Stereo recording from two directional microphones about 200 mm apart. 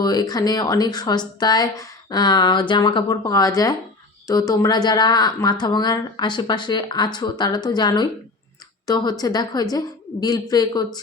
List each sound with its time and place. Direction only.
0.0 s speech: 20° left (ahead or behind)